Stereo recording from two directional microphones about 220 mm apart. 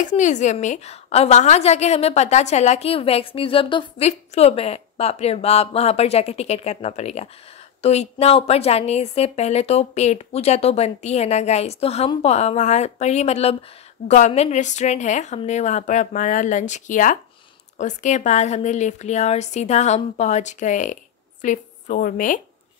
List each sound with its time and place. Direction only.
0.0 s a woman's voice: 35° left (ahead or behind)